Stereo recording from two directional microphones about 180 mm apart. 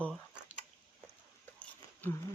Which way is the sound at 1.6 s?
10° left (ahead or behind).